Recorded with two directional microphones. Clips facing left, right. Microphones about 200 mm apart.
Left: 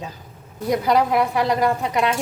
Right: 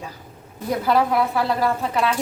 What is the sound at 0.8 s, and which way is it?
A woman's voice, 15° left (ahead or behind).